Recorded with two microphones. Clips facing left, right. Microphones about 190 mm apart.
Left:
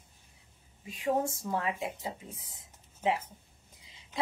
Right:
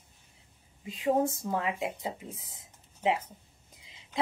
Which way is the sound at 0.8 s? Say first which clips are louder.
Right 3 dB; 20° right (ahead or behind).